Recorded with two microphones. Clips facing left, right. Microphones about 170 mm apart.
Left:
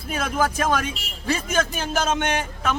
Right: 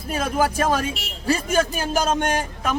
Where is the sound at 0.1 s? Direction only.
30° right (ahead or behind).